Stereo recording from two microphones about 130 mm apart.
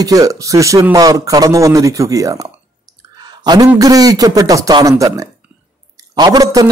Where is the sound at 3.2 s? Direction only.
35° right (ahead or behind).